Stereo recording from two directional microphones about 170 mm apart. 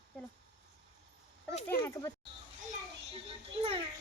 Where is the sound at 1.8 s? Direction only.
20° left (ahead or behind).